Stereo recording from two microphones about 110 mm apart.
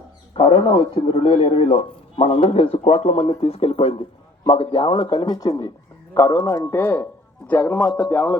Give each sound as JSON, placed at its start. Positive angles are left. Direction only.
{"t": 0.3, "sound": "a man's voice", "side_deg": 55}
{"t": 6.1, "sound": "a man's voice", "side_deg": 25}